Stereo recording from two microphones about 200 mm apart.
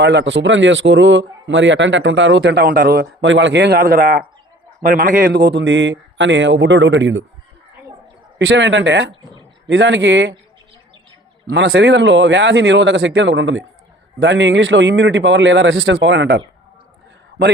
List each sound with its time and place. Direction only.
0.0 s a man's voice: 60° right (ahead or behind)
8.4 s a man's voice: 65° right (ahead or behind)
11.5 s a man's voice: 60° right (ahead or behind)